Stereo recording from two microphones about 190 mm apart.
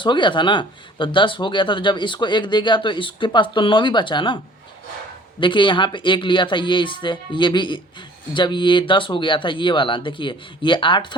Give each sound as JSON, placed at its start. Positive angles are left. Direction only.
{"t": 0.0, "sound": "speech", "side_deg": 25}
{"t": 5.4, "sound": "speech", "side_deg": 25}